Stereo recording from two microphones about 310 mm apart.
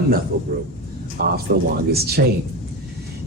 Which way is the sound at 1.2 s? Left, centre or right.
Right.